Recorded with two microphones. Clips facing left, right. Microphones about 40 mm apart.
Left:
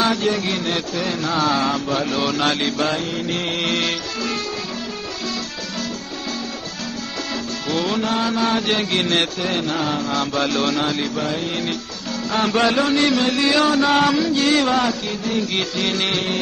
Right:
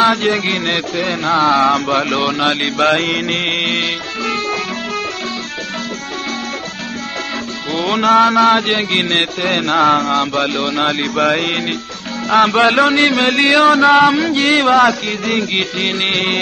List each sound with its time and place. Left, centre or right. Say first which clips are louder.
0.0 s a sound: right 6 dB; right
2.2 s a man's voice: right 4 dB; right
2.8 s music: right 8 dB; right
3.3 s music: right 5 dB; right
8.0 s mantra: right 10 dB; right
8.6 s a man's voice: right 4 dB; right
9.5 s mantra: right 9 dB; right
10.1 s a sound: right 4 dB; right
10.8 s a sound: right 5 dB; right
11.1 s music: right 8 dB; right
12.3 s a sound: right 7 dB; right
15.5 s a man's voice: right 4 dB; right